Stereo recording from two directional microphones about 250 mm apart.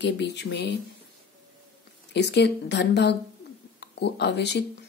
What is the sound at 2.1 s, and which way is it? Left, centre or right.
A woman's voice, left.